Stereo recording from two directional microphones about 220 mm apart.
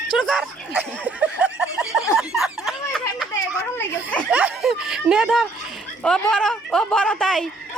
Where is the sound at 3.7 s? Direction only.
5° left (ahead or behind).